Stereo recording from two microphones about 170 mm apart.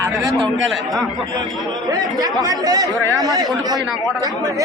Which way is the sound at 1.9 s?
20° right (ahead or behind).